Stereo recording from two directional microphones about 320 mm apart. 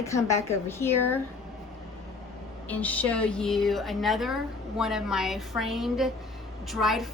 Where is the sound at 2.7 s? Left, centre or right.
Centre.